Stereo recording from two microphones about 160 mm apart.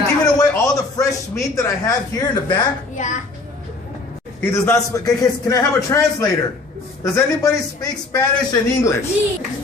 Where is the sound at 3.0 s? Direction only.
50° left (ahead or behind).